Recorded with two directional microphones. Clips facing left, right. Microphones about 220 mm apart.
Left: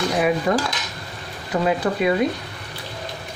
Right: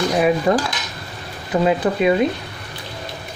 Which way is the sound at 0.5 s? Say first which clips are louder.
Right 3 dB; 30° right (ahead or behind).